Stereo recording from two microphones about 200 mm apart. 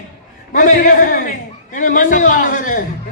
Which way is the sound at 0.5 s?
40° left (ahead or behind).